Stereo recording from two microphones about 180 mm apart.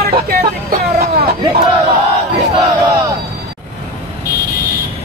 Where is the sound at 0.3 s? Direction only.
55° right (ahead or behind).